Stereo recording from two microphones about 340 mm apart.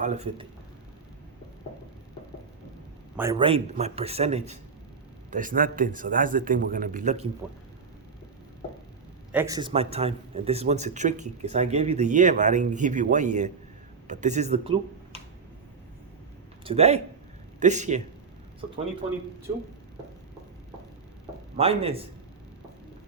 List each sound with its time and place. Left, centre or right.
0.0 s speech: centre
3.2 s a man's voice: centre
9.3 s speech: centre
16.6 s a man's voice: centre
21.5 s a man's voice: centre